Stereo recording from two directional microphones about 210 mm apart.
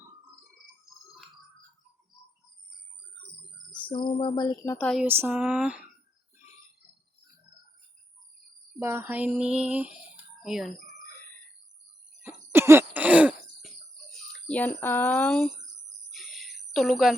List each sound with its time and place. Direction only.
3.8 s speech: 25° left (ahead or behind)
4.9 s speech: 5° right (ahead or behind)
8.8 s a sound: 10° right (ahead or behind)
10.4 s speech: centre (ahead or behind)
12.2 s cough: 10° right (ahead or behind); by 15.4 s 5° left (ahead or behind)
16.1 s a sound: centre (ahead or behind)